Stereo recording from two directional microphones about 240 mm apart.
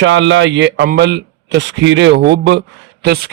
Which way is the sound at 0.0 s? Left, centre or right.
Right.